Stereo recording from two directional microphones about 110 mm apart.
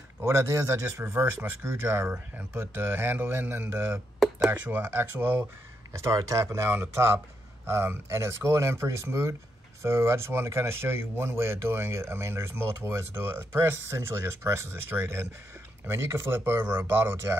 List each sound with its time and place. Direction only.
0.2 s speech: 25° right (ahead or behind)
5.9 s speech: 30° right (ahead or behind)